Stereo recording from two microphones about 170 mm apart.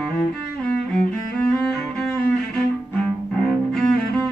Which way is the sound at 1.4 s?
5° left (ahead or behind).